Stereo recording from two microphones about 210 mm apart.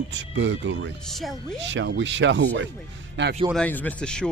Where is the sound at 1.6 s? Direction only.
60° right (ahead or behind).